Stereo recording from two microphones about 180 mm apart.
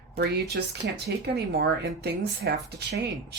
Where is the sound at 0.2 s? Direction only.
65° right (ahead or behind).